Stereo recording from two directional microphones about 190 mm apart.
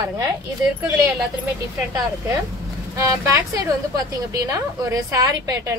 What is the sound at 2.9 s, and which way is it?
A woman's voice, 15° right (ahead or behind).